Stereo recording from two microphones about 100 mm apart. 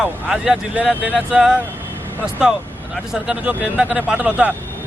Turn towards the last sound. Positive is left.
turn(degrees=-15)  # may be behind; listen again after turning